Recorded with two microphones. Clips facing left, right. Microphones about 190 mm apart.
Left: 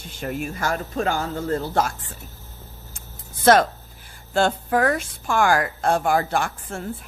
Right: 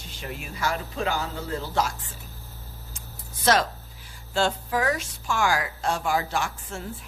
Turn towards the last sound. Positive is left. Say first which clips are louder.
# left 4 dB
turn(degrees=55)  # may be behind; listen again after turning